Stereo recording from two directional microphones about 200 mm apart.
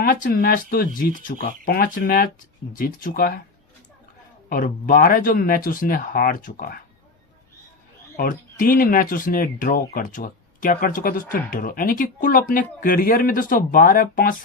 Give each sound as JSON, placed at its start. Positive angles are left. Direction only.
{"t": 0.0, "sound": "speech", "side_deg": 50}
{"t": 4.4, "sound": "speech", "side_deg": 45}
{"t": 8.1, "sound": "speech", "side_deg": 45}